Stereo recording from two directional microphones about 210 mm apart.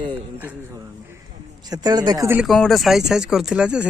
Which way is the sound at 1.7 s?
20° right (ahead or behind).